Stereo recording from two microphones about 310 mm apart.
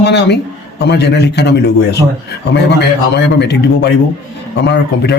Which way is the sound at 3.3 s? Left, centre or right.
Left.